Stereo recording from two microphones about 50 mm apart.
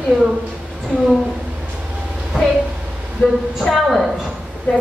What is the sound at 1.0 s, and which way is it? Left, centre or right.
Speech, centre.